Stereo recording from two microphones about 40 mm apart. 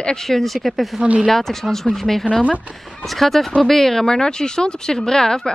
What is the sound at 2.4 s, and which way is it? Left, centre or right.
Speech, right.